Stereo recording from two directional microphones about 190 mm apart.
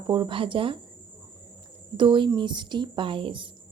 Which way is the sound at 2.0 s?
25° right (ahead or behind).